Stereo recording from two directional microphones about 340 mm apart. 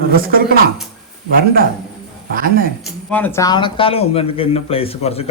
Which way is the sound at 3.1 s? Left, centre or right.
Centre.